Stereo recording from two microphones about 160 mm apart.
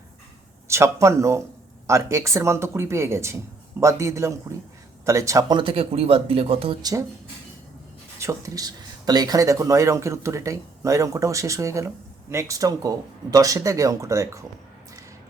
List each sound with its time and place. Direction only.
0.7 s speech: 15° right (ahead or behind); by 6.7 s 35° right (ahead or behind)
8.2 s speech: 20° right (ahead or behind)